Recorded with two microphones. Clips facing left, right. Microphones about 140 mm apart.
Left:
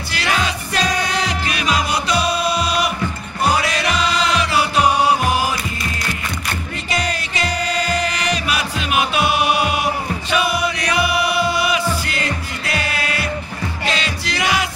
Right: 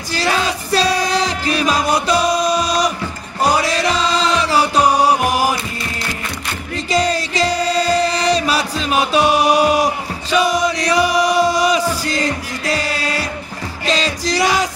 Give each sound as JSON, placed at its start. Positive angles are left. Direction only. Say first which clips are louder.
{"t": 0.1, "sound": "music", "louder": "right 3 dB", "side_deg": -35}
{"t": 6.9, "sound": "music", "louder": "right 7 dB", "side_deg": -35}
{"t": 10.3, "sound": "chant", "louder": "right 5 dB", "side_deg": -40}
{"t": 11.9, "sound": "music", "louder": "right 3 dB", "side_deg": -35}